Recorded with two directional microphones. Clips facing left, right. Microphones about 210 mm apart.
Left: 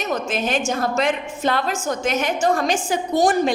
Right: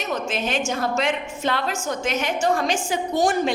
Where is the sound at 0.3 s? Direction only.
45° left (ahead or behind).